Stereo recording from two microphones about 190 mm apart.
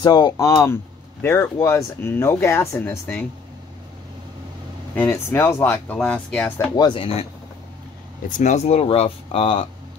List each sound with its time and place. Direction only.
0.0 s speech: 20° left (ahead or behind)
4.9 s speech: 10° left (ahead or behind)
6.8 s speech: 30° left (ahead or behind)
8.4 s speech: 40° left (ahead or behind)